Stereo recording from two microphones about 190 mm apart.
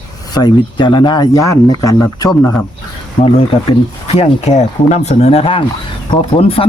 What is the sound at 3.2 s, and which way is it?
Speech, 30° left (ahead or behind).